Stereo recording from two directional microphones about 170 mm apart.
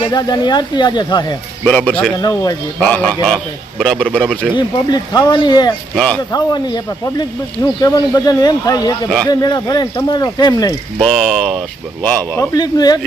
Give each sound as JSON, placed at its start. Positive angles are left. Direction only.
{"t": 0.0, "sound": "speech", "side_deg": 25}
{"t": 1.6, "sound": "a man's voice", "side_deg": 10}
{"t": 4.5, "sound": "speech", "side_deg": 25}
{"t": 5.9, "sound": "speech", "side_deg": 5}
{"t": 6.3, "sound": "speech", "side_deg": 25}
{"t": 10.9, "sound": "a man's voice", "side_deg": 0}
{"t": 12.5, "sound": "speech", "side_deg": 25}